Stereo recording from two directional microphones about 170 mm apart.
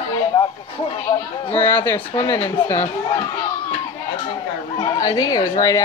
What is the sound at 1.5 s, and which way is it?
Speech, 15° left (ahead or behind).